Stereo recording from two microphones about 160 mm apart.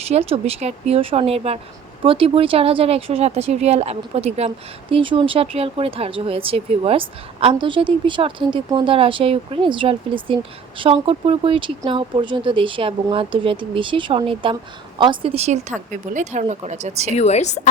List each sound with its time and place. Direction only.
0.0 s speech: 40° right (ahead or behind)
17.2 s a woman's voice: 45° left (ahead or behind)